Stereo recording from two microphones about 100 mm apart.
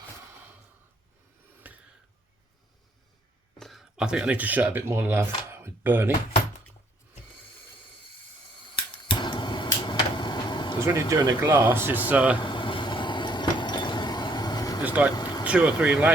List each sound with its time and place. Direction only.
1.6 s a sound: 15° right (ahead or behind)
3.6 s speech: centre (ahead or behind); by 6.1 s 20° right (ahead or behind)
8.7 s a sound: 55° left (ahead or behind)
11.3 s speech: 25° right (ahead or behind)
12.4 s vehicle: 55° left (ahead or behind)
14.8 s speech: 15° right (ahead or behind)
15.1 s vehicle: 45° left (ahead or behind)
15.4 s speech: 10° right (ahead or behind)